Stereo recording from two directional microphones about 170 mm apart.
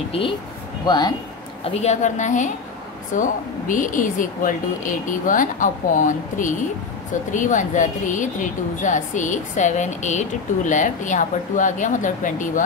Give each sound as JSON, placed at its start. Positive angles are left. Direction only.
{"t": 0.8, "sound": "speech", "side_deg": 25}
{"t": 1.6, "sound": "speech", "side_deg": 40}